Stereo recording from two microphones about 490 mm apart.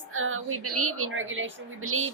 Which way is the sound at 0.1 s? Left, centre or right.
Right.